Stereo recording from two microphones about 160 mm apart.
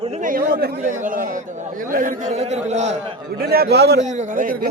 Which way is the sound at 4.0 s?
45° right (ahead or behind).